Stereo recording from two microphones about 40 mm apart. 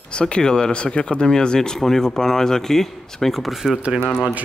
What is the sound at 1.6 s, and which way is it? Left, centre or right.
Speech, centre.